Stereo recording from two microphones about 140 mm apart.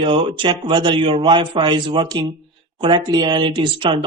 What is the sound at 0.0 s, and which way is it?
Speech, 40° right (ahead or behind).